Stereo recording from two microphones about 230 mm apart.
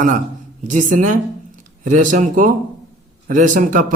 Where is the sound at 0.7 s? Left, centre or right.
Right.